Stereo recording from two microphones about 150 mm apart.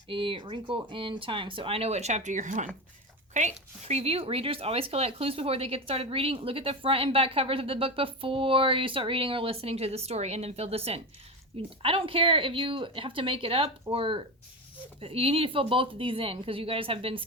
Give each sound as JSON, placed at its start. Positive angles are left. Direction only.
{"t": 0.1, "sound": "speech", "side_deg": -35}